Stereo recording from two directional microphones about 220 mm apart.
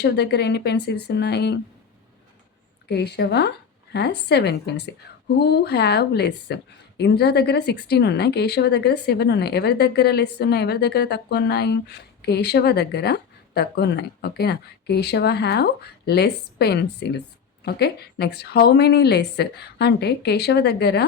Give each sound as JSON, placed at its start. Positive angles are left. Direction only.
{"t": 0.0, "sound": "a woman's voice", "side_deg": 50}
{"t": 2.9, "sound": "a woman's voice", "side_deg": 50}